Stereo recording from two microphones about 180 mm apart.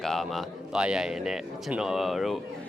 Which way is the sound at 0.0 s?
Centre (ahead or behind).